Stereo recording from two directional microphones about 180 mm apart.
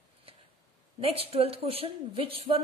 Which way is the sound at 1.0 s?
30° right (ahead or behind).